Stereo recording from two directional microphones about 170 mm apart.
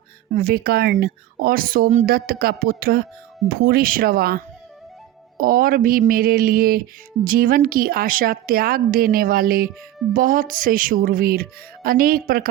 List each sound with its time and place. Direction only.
0.3 s a woman's voice: 60° right (ahead or behind)
2.0 s a woman's voice: 60° right (ahead or behind)